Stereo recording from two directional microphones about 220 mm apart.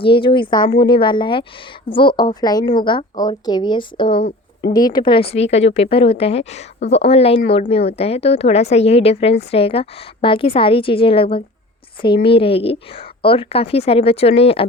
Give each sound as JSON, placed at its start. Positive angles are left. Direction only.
{"t": 0.0, "sound": "a woman's voice", "side_deg": 25}